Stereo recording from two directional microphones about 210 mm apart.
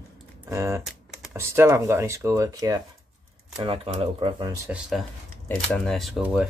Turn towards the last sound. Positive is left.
turn(degrees=0)  # may be behind; listen again after turning